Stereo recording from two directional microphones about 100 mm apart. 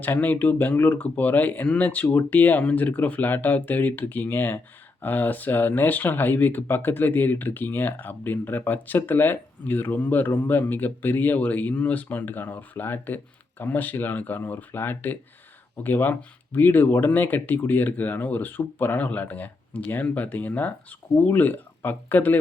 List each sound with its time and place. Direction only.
0.0 s speech: 15° left (ahead or behind)